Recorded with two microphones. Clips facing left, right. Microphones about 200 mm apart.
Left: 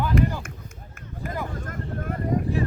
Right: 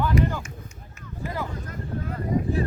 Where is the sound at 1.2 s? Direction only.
50° left (ahead or behind).